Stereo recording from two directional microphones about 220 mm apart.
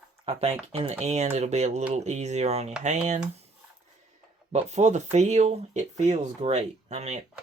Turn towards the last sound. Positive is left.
turn(degrees=-30)  # may be behind; listen again after turning